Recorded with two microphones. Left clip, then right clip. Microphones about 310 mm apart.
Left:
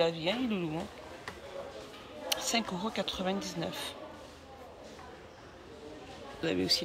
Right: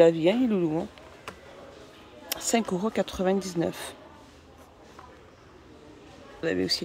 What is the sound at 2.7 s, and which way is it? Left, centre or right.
Speech, right.